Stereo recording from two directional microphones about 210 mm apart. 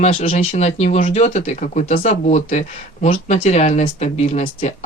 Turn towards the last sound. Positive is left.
turn(degrees=30)  # may be behind; listen again after turning